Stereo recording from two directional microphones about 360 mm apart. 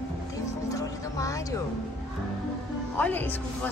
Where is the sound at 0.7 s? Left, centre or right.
Centre.